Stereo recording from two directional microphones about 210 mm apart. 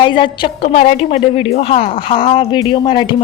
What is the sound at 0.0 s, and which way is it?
A woman's voice, 25° left (ahead or behind).